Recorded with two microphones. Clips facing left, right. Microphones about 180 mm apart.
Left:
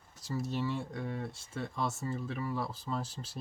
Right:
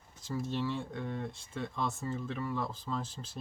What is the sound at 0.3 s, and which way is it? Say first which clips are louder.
Speech: even; 5° left (ahead or behind).